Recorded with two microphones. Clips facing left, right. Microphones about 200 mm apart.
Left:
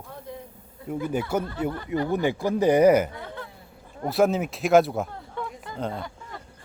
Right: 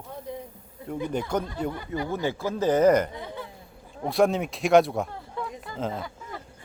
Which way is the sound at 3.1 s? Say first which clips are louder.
Right 1 dB; 15° right (ahead or behind).